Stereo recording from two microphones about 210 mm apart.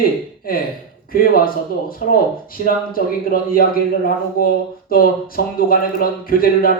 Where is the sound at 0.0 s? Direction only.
45° left (ahead or behind).